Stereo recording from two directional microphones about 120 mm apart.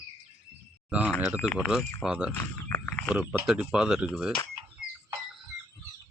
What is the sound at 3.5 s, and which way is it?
Speech, 5° right (ahead or behind).